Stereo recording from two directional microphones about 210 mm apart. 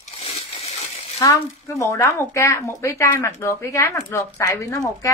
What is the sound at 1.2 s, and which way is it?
Speech, 15° left (ahead or behind).